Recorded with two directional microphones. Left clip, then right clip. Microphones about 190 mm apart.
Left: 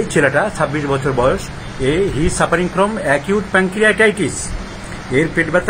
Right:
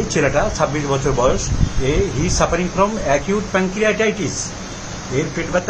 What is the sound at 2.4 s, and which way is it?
Speech, 10° left (ahead or behind).